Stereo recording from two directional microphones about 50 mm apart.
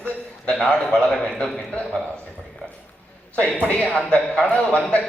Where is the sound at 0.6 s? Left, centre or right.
Centre.